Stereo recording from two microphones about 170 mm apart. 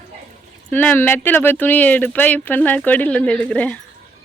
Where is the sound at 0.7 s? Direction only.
10° left (ahead or behind).